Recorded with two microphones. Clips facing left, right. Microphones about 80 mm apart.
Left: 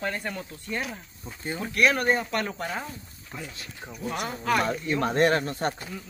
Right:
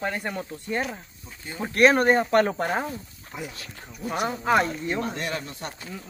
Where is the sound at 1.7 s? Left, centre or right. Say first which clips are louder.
Right 5 dB; right.